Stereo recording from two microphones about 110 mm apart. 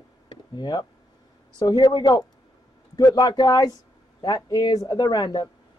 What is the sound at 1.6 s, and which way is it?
Speech, 40° left (ahead or behind).